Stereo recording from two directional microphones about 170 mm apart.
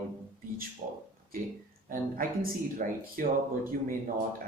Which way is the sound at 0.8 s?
50° right (ahead or behind).